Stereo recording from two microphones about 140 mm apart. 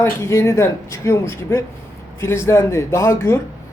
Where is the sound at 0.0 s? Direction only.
20° left (ahead or behind).